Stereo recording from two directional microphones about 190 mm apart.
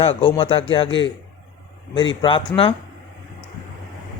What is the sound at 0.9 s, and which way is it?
Speech, 75° left (ahead or behind).